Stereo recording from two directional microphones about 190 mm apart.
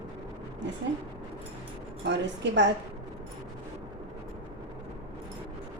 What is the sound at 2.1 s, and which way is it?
Speech, 65° right (ahead or behind).